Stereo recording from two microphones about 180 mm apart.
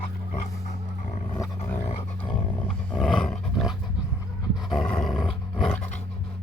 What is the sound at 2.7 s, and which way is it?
Roar, 5° left (ahead or behind).